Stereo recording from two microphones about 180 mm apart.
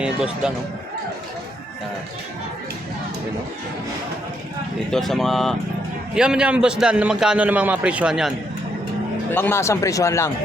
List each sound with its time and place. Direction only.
0.0 s a man's voice: 5° right (ahead or behind)
4.9 s a man's voice: centre (ahead or behind)
9.3 s speech: 10° left (ahead or behind)